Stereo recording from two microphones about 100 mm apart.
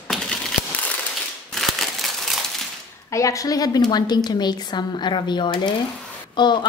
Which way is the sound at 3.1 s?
30° left (ahead or behind).